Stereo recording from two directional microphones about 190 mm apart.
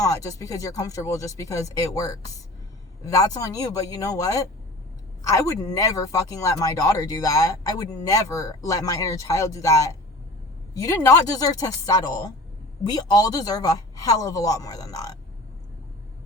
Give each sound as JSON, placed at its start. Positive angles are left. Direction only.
{"t": 0.0, "sound": "speech", "side_deg": 15}